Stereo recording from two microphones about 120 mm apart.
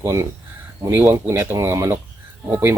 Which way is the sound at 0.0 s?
25° right (ahead or behind).